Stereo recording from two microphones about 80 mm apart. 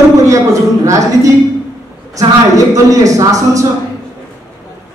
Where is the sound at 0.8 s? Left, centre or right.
Right.